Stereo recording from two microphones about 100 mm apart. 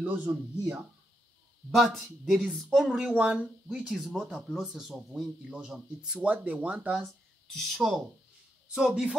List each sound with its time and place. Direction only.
0.0 s speech: 15° right (ahead or behind)
1.7 s a woman's voice: 5° right (ahead or behind)
7.5 s a woman's voice: centre (ahead or behind)